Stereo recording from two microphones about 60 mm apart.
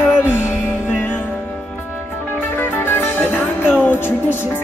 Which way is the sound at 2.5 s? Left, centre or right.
Left.